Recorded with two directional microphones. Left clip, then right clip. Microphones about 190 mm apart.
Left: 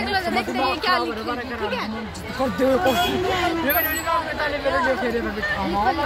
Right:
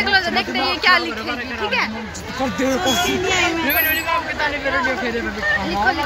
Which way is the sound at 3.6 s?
25° left (ahead or behind).